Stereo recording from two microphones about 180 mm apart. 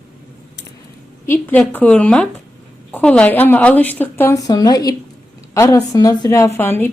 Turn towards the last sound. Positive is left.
turn(degrees=10)  # may be behind; listen again after turning